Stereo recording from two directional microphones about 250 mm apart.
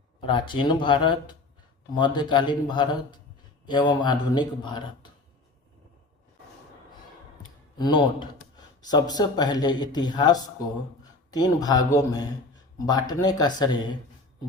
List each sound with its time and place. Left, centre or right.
0.2 s speech: centre
7.8 s a man's voice: centre